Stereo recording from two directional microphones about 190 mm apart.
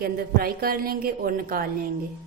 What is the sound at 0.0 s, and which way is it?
A woman's voice, 50° right (ahead or behind).